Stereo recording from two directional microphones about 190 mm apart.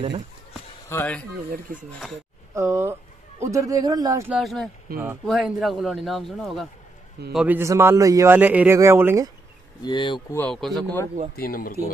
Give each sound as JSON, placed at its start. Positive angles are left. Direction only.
{"t": 0.8, "sound": "speech", "side_deg": 10}
{"t": 1.5, "sound": "speech", "side_deg": -45}
{"t": 2.5, "sound": "speech", "side_deg": -15}
{"t": 4.3, "sound": "a man's voice", "side_deg": 0}
{"t": 7.3, "sound": "a man's voice", "side_deg": -10}
{"t": 9.8, "sound": "speech", "side_deg": 25}
{"t": 10.3, "sound": "a man's voice", "side_deg": 5}
{"t": 11.3, "sound": "speech", "side_deg": 50}